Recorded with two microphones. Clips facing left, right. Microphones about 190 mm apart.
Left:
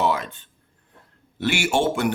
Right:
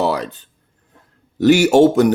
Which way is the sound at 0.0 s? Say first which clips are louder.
Right 4 dB; 35° right (ahead or behind).